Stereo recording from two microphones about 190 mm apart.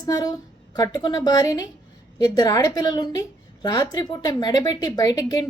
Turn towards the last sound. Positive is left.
turn(degrees=20)  # may be behind; listen again after turning